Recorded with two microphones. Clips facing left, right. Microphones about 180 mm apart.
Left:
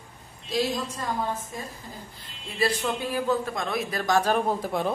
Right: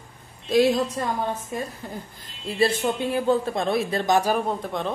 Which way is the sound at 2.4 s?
30° right (ahead or behind).